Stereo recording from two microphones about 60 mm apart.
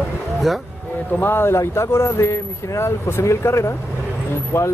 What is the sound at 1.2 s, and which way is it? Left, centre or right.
Speech, left.